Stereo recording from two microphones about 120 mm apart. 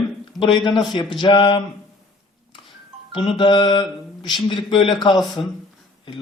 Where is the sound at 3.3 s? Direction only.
40° left (ahead or behind).